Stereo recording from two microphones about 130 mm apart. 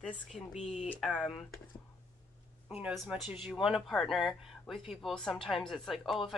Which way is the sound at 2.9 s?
Centre (ahead or behind).